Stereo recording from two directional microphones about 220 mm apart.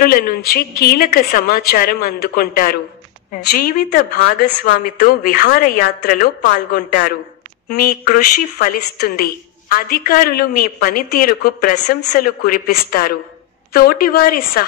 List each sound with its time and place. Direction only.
0.0 s a woman's voice: 40° left (ahead or behind)